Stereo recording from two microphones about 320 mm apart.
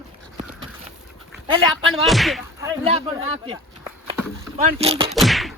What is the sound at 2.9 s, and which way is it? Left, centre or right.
Speech, centre.